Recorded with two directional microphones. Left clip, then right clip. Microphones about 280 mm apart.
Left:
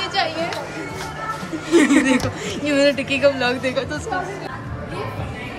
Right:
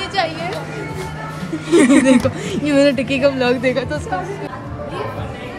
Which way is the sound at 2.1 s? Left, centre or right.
Centre.